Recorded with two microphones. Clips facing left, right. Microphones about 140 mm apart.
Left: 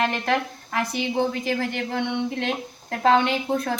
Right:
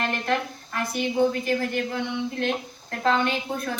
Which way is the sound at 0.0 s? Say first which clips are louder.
Left 3 dB; 90° left.